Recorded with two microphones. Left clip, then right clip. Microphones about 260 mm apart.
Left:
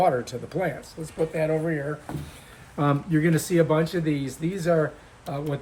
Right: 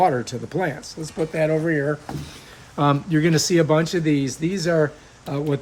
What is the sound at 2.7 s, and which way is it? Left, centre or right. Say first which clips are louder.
Speech: right 4 dB; centre.